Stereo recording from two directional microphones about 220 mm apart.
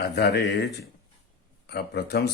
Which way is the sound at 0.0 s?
45° left (ahead or behind).